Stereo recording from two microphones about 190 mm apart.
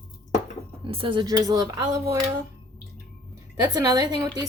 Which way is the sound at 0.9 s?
25° right (ahead or behind).